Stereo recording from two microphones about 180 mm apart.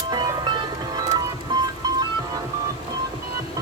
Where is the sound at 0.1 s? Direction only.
20° right (ahead or behind).